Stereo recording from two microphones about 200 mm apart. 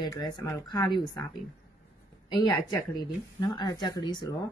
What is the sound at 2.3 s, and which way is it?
Speech, 20° left (ahead or behind).